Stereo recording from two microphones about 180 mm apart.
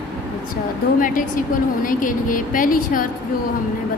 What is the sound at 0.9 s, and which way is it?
A woman's voice, 50° left (ahead or behind).